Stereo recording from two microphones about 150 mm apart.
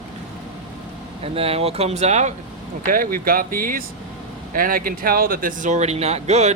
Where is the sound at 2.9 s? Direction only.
70° right (ahead or behind); by 6.5 s 45° right (ahead or behind).